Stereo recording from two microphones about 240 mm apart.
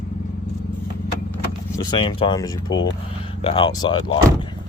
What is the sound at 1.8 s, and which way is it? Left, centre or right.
Speech, centre.